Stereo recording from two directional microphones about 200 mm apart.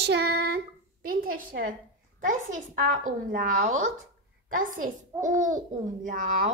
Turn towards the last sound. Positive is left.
turn(degrees=-45)  # may be behind; listen again after turning